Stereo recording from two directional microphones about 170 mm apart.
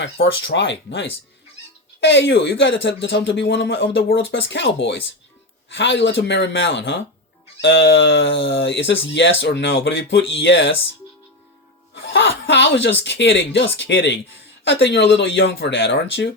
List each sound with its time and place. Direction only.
0.0 s speech: 90° left
12.1 s speech: 90° left